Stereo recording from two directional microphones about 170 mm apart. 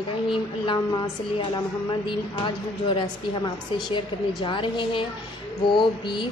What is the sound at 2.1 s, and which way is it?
A woman's voice, 30° left (ahead or behind).